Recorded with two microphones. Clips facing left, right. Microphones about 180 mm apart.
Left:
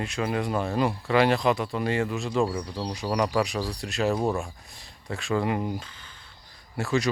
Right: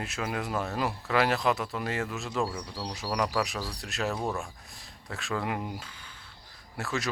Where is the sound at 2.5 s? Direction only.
15° left (ahead or behind).